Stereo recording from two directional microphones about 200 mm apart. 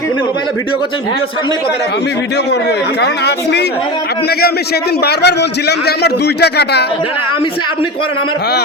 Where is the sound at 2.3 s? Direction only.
60° left (ahead or behind).